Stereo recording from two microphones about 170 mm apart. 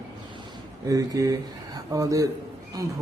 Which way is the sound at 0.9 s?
20° right (ahead or behind).